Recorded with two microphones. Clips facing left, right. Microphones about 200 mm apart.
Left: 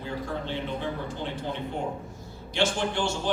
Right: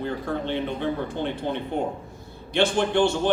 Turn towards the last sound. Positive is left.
turn(degrees=-60)  # may be behind; listen again after turning